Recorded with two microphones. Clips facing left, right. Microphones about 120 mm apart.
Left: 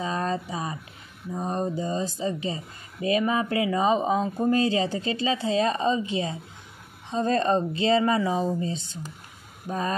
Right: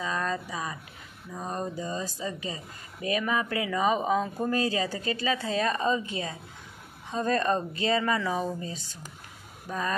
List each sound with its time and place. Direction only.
0.0 s speech: 30° left (ahead or behind)